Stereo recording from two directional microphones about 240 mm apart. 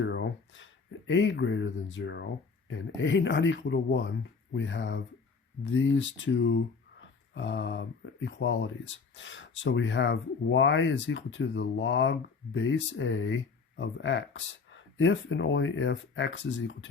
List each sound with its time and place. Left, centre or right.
0.0 s speech: left